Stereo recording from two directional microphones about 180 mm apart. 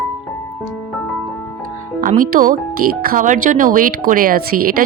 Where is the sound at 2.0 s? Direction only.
50° right (ahead or behind).